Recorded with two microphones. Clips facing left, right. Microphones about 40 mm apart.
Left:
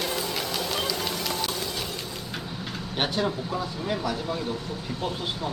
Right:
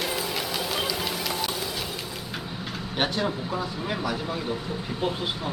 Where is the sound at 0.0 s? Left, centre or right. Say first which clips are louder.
Even; centre.